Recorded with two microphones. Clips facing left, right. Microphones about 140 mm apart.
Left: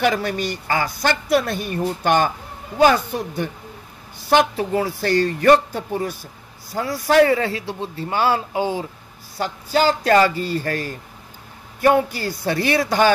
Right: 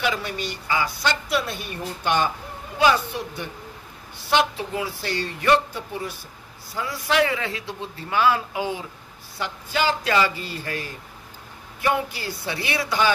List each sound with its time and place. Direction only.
0.0 s a woman's voice: 45° left (ahead or behind)